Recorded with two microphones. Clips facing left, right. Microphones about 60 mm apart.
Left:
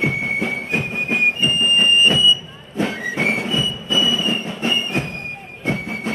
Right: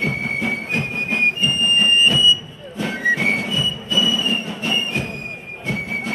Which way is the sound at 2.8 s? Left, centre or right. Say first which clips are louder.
Right 3 dB; left.